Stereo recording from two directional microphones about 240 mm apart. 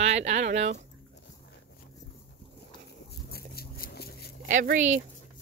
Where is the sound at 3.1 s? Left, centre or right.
Left.